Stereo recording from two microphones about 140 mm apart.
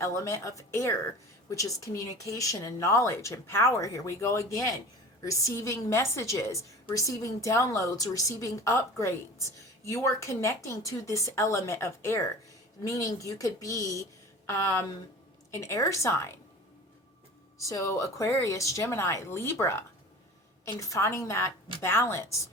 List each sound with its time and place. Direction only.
0.0 s a woman's voice: 20° left (ahead or behind)
17.6 s a woman's voice: 20° left (ahead or behind)